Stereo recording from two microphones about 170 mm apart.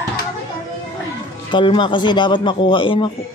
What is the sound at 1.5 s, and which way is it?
Speech, 30° left (ahead or behind).